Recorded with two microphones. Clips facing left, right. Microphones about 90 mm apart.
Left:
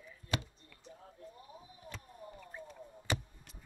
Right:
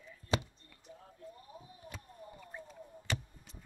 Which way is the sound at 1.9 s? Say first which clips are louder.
Left 2 dB; 5° right (ahead or behind).